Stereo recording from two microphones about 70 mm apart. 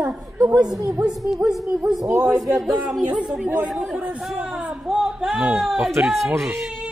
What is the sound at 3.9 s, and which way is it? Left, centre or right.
A woman's voice, centre.